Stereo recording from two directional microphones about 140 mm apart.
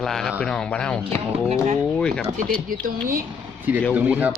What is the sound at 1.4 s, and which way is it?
Speech, 50° right (ahead or behind).